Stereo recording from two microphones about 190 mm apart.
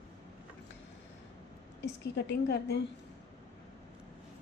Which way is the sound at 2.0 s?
65° left (ahead or behind).